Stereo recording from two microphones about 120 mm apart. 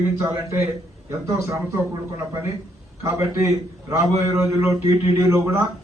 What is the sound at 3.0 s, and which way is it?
A man's voice, 25° right (ahead or behind).